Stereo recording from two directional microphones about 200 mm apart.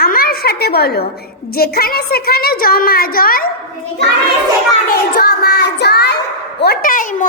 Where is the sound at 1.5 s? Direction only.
50° left (ahead or behind).